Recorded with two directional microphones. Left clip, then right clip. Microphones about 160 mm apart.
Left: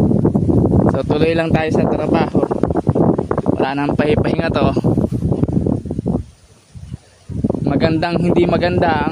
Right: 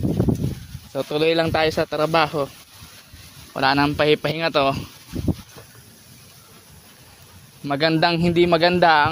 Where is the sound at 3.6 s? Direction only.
35° left (ahead or behind).